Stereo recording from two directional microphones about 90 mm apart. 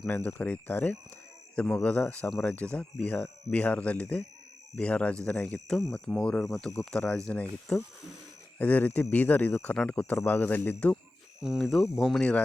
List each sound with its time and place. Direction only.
0.3 s speech: 15° left (ahead or behind)
8.5 s speech: 20° left (ahead or behind)
11.3 s speech: 5° right (ahead or behind)